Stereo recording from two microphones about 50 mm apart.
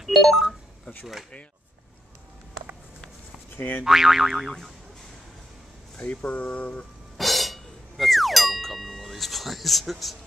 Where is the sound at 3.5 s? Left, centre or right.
Left.